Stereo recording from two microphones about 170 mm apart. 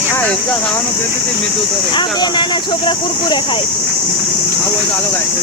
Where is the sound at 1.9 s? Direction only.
25° left (ahead or behind).